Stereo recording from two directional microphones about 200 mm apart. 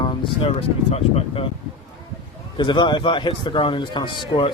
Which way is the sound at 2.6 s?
20° left (ahead or behind).